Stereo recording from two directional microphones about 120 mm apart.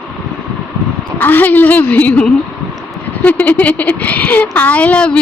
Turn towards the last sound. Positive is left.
turn(degrees=10)  # may be behind; listen again after turning